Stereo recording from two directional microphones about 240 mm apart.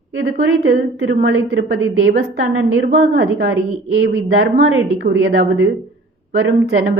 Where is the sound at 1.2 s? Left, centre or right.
Right.